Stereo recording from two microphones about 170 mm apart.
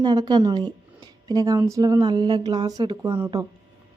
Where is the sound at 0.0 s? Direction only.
25° right (ahead or behind).